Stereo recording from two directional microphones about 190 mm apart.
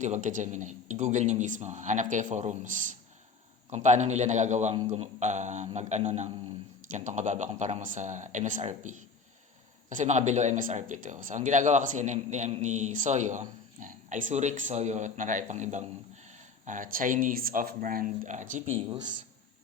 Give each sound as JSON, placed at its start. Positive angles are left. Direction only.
{"t": 0.0, "sound": "speech", "side_deg": -40}
{"t": 18.9, "sound": "a man's voice", "side_deg": -25}